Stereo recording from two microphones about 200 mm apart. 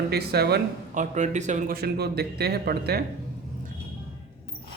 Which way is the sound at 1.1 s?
35° right (ahead or behind).